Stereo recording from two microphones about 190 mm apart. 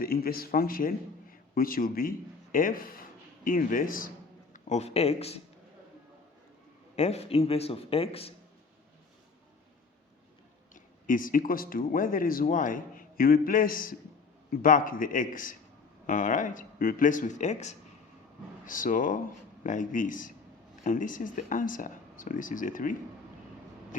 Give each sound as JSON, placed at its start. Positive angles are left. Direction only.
{"t": 0.0, "sound": "a man's voice", "side_deg": 50}
{"t": 4.5, "sound": "speech", "side_deg": 35}
{"t": 6.9, "sound": "a man's voice", "side_deg": 35}
{"t": 10.8, "sound": "speech", "side_deg": 45}